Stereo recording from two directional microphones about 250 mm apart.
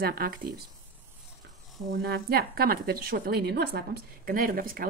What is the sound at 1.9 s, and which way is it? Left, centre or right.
Speech, right.